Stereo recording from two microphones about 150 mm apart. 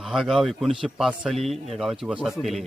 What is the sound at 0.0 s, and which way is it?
A man's voice, centre (ahead or behind).